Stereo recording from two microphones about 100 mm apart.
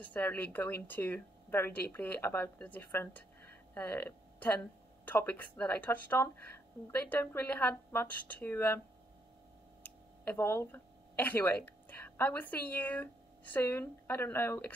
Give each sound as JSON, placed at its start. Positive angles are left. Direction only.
{"t": 0.0, "sound": "a woman's voice", "side_deg": 15}
{"t": 9.8, "sound": "speech", "side_deg": 20}